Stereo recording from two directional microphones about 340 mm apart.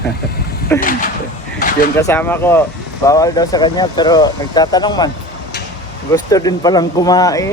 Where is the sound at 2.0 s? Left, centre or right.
Centre.